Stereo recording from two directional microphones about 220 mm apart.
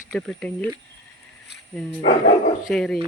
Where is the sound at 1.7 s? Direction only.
5° left (ahead or behind).